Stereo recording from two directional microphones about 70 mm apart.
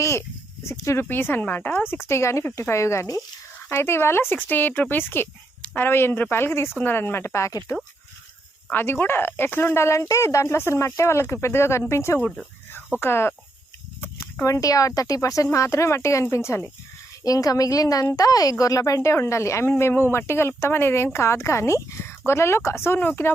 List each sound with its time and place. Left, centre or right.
0.0 s speech: left
1.0 s speech: left
8.7 s speech: left
14.4 s speech: left
17.2 s a woman's voice: left
19.1 s speech: left